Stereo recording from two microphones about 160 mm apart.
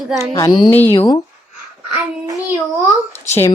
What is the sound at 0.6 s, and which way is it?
Speech, 15° left (ahead or behind).